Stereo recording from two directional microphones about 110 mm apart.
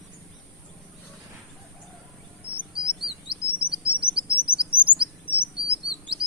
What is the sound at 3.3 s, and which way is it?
Bird, 50° right (ahead or behind).